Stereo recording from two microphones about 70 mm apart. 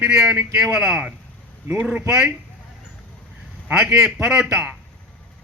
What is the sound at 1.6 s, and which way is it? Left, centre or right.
Speech, right.